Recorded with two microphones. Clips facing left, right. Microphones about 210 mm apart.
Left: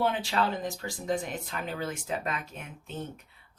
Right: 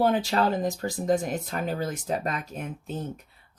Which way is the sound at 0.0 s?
40° right (ahead or behind).